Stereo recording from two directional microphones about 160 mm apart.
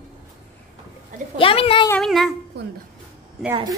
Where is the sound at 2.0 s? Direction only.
Centre (ahead or behind).